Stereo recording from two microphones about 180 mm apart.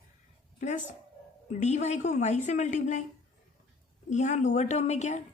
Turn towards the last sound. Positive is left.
turn(degrees=40)  # may be behind; listen again after turning